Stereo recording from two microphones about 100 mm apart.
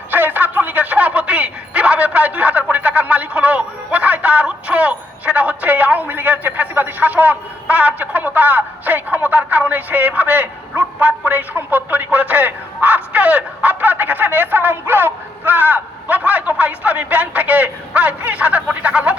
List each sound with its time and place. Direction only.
0.1 s telephone: 20° right (ahead or behind)